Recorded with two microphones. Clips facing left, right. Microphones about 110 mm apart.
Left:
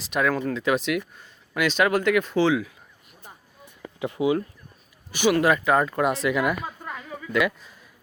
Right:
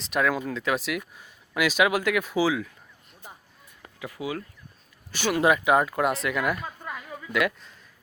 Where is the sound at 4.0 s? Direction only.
25° left (ahead or behind).